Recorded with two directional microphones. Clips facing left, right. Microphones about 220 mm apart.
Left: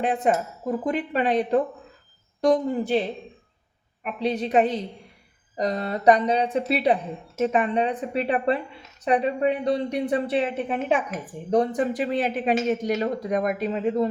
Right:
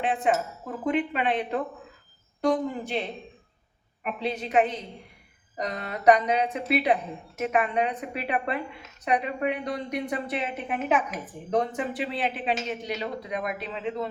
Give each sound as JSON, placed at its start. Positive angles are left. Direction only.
{"t": 0.0, "sound": "a woman's voice", "side_deg": 40}
{"t": 4.0, "sound": "a woman's voice", "side_deg": 0}
{"t": 4.3, "sound": "a woman's voice", "side_deg": 35}
{"t": 11.8, "sound": "speech", "side_deg": 40}